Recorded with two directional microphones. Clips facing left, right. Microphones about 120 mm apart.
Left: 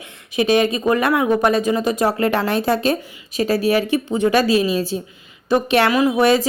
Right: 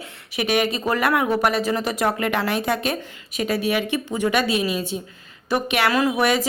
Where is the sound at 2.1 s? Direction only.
40° left (ahead or behind).